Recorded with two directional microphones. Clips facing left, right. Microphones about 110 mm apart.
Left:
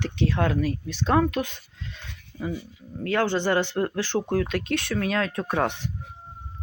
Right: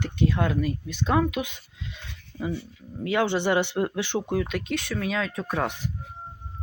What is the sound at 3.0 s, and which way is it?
Speech, 15° right (ahead or behind).